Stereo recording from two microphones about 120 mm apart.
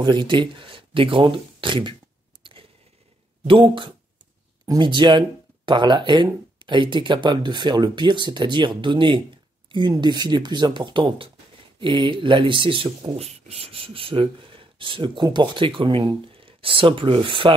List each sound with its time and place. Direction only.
0.0 s speech: 40° right (ahead or behind)
3.4 s speech: 45° right (ahead or behind)
13.2 s speech: 60° right (ahead or behind)